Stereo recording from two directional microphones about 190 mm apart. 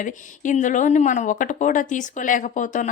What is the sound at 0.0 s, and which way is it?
Speech, 40° left (ahead or behind).